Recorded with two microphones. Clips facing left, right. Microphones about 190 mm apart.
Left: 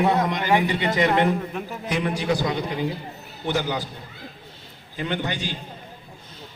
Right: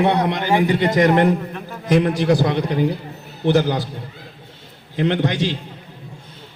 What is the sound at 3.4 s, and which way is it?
Speech, 40° right (ahead or behind).